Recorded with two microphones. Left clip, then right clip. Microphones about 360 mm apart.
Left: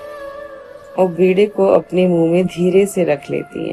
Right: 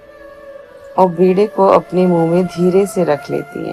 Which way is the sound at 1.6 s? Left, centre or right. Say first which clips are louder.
Right 2 dB; centre.